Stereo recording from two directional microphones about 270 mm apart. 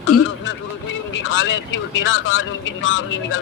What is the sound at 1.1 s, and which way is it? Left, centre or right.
Speech, left.